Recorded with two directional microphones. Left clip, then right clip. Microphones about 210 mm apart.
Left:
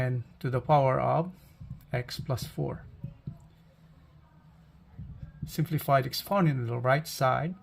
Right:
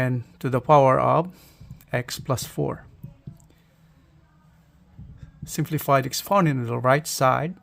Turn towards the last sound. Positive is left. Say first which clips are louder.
# right 6 dB
turn(degrees=-40)  # may be behind; listen again after turning